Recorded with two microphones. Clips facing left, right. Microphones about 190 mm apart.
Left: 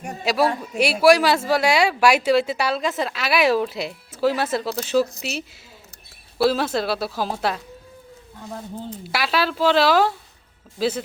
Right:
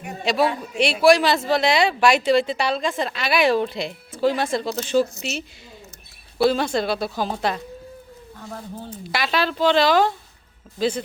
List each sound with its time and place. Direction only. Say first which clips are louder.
0.3 s a woman's voice: even; 5° left (ahead or behind)
6.4 s a woman's voice: right 1 dB; 5° left (ahead or behind)
8.4 s a woman's voice: left 2 dB; 20° left (ahead or behind)
9.1 s a woman's voice: even; 5° left (ahead or behind)